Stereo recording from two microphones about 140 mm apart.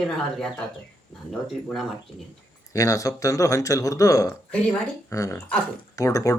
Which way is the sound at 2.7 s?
25° left (ahead or behind).